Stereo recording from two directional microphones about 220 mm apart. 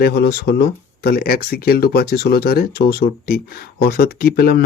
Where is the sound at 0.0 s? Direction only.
45° left (ahead or behind).